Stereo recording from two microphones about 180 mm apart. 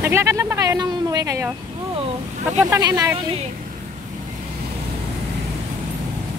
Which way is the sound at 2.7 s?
20° right (ahead or behind).